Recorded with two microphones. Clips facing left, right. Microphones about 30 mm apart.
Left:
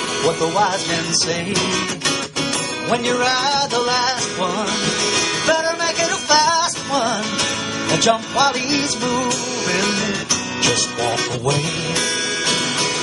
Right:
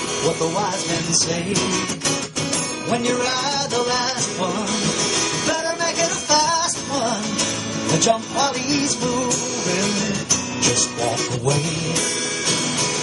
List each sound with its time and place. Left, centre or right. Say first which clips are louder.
0.2 s music: left 4 dB; left